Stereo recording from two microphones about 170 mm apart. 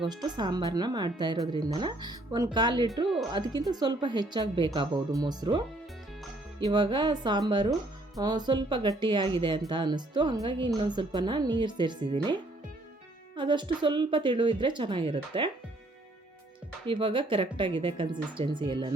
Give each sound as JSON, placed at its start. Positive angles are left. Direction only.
{"t": 0.0, "sound": "speech", "side_deg": -25}
{"t": 6.7, "sound": "speech", "side_deg": -25}
{"t": 16.8, "sound": "speech", "side_deg": -30}